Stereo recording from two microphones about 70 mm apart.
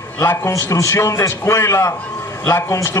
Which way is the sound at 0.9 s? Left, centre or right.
Left.